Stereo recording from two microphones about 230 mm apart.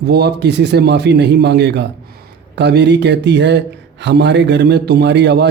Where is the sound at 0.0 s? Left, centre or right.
Right.